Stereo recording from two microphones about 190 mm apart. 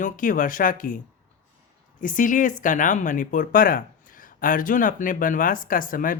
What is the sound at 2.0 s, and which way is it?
Speech, 45° left (ahead or behind).